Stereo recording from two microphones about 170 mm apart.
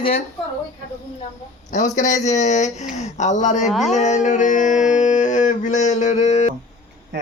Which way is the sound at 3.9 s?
45° left (ahead or behind).